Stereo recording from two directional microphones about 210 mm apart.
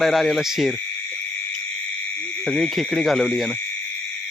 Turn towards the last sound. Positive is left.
turn(degrees=0)  # may be behind; listen again after turning